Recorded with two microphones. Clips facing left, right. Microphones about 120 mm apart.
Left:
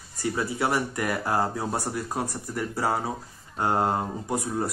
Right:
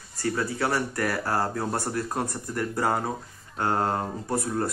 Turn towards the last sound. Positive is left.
turn(degrees=10)  # may be behind; listen again after turning